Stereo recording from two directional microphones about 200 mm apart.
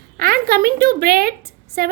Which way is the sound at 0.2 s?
50° right (ahead or behind).